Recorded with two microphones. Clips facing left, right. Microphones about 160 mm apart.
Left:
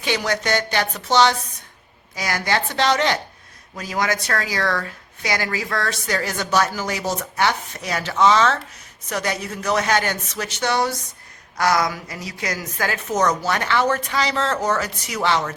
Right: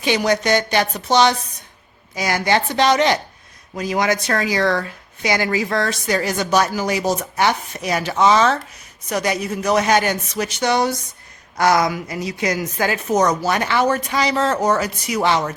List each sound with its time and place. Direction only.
0.0 s a woman's voice: 15° right (ahead or behind)